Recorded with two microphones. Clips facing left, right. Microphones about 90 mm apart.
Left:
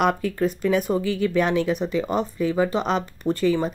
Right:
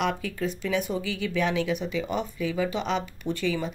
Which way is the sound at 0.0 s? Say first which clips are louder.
Left 6 dB; 45° left (ahead or behind).